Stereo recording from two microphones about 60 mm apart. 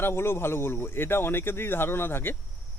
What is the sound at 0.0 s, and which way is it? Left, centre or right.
Speech, left.